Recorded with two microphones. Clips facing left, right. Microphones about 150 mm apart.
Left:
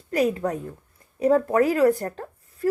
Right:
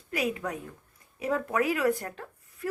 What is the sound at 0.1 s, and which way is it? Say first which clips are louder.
Speech: left 8 dB; 40° left (ahead or behind).